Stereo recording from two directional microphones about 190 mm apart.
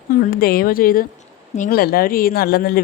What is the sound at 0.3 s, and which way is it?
Speech, 50° left (ahead or behind).